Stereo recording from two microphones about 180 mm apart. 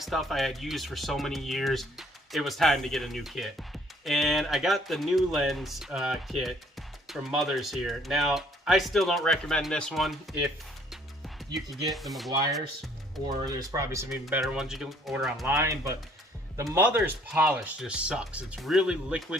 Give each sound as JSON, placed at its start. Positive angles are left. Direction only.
{"t": 0.0, "sound": "speech", "side_deg": 0}
{"t": 11.9, "sound": "speech", "side_deg": 0}
{"t": 13.2, "sound": "speech", "side_deg": -20}
{"t": 14.4, "sound": "speech", "side_deg": 0}
{"t": 15.4, "sound": "speech", "side_deg": -15}